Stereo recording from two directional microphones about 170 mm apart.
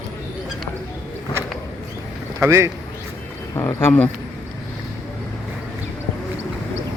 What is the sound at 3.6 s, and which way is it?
Speech, 15° left (ahead or behind).